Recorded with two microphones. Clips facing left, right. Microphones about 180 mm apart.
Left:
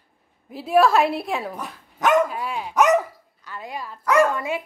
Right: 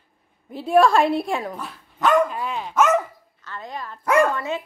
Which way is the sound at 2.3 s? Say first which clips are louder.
Even; 5° left (ahead or behind).